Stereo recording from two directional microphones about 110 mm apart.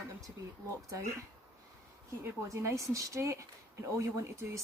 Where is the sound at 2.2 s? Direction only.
25° right (ahead or behind).